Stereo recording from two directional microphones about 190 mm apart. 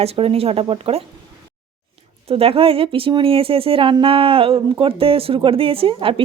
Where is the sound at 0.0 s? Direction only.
30° right (ahead or behind).